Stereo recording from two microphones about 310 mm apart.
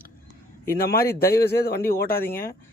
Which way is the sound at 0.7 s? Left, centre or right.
Left.